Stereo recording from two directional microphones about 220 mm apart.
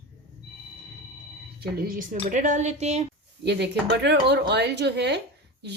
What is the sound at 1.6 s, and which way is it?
A woman's voice, 45° right (ahead or behind).